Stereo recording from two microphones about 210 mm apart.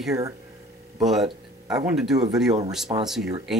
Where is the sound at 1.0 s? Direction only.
Centre (ahead or behind).